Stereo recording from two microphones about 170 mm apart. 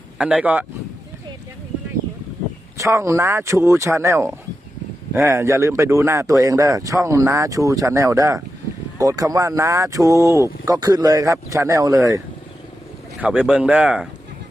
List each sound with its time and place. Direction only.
0.2 s speech: 5° right (ahead or behind)
2.7 s speech: 15° right (ahead or behind)
13.1 s speech: 5° right (ahead or behind)